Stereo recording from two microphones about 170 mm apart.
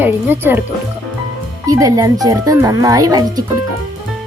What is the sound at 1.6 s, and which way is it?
Speech, 20° right (ahead or behind).